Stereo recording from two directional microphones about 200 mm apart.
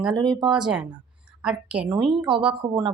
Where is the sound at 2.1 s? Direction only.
25° right (ahead or behind).